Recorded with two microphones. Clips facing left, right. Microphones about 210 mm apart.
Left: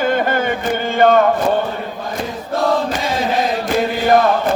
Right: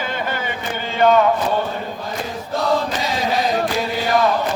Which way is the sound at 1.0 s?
50° left (ahead or behind).